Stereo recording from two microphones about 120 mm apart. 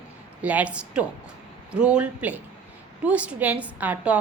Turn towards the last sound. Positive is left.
turn(degrees=-10)  # may be behind; listen again after turning